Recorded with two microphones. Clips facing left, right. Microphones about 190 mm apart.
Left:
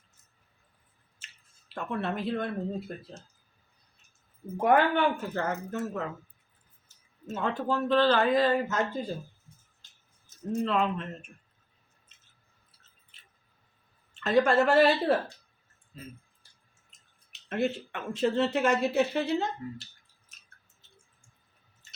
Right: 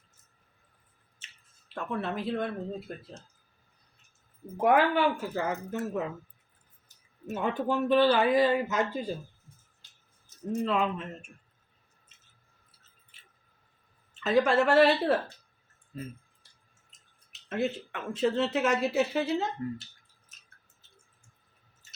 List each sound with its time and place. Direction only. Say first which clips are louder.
1.7 s speech: left 1 dB; centre (ahead or behind)
4.5 s speech: even; 5° right (ahead or behind)
7.3 s speech: right 1 dB; 15° right (ahead or behind)
10.6 s speech: left 1 dB; 10° right (ahead or behind)
14.1 s speech: left 1 dB; 5° right (ahead or behind)
15.9 s speech: right 6 dB; 50° right (ahead or behind)
17.5 s speech: left 1 dB; centre (ahead or behind)